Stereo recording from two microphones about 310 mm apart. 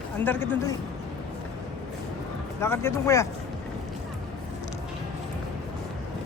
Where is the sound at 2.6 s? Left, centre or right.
Centre.